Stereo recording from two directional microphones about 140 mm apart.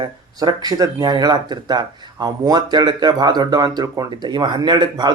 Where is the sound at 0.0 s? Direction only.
30° right (ahead or behind).